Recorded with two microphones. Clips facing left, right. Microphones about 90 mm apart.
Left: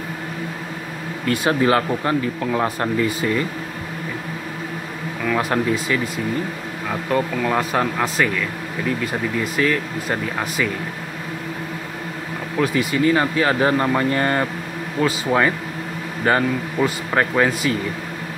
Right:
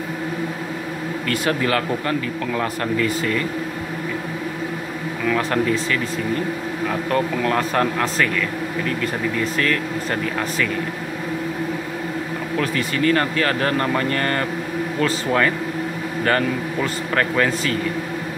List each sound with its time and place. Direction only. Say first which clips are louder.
1.2 s speech: left 4 dB; 20° left (ahead or behind)
5.2 s speech: even; 10° left (ahead or behind)
12.5 s speech: left 3 dB; 10° left (ahead or behind)